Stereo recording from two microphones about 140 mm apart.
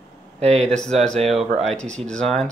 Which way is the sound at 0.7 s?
5° left (ahead or behind).